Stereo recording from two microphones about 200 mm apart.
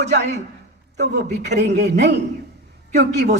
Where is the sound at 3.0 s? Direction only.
60° right (ahead or behind).